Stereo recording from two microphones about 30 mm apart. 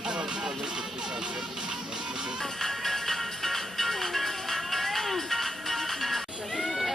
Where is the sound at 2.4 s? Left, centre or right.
Centre.